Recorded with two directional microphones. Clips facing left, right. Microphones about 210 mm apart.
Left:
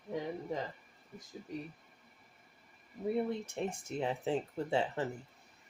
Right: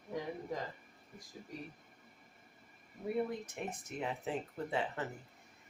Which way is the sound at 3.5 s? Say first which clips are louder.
Left 5 dB; 30° left (ahead or behind).